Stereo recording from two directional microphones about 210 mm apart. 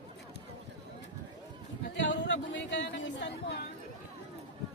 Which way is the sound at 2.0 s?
55° left (ahead or behind).